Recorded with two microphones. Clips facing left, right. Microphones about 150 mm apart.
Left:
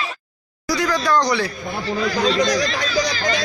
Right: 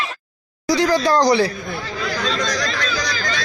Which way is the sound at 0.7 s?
30° right (ahead or behind).